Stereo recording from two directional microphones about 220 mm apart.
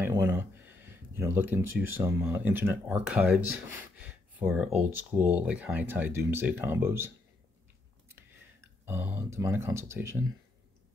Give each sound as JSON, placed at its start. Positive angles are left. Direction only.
{"t": 0.0, "sound": "speech", "side_deg": -15}
{"t": 8.8, "sound": "speech", "side_deg": -10}